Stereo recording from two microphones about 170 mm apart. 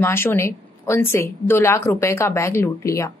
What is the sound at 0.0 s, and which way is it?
A woman's voice, 15° left (ahead or behind).